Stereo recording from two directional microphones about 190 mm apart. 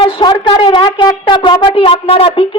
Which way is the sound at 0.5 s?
25° left (ahead or behind).